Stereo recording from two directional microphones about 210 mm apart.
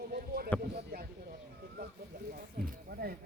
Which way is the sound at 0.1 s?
45° right (ahead or behind).